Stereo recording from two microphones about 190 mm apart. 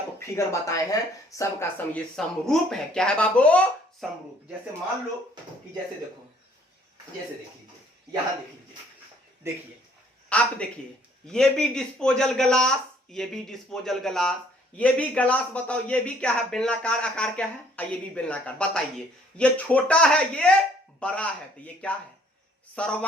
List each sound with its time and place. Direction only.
0.2 s speech: 15° left (ahead or behind)
2.1 s a man's voice: centre (ahead or behind)
10.2 s a man's voice: 5° left (ahead or behind)